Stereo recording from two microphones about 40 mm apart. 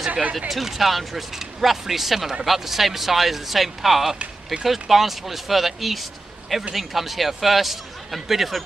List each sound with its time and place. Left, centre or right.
0.1 s speech: right
0.5 s speech: centre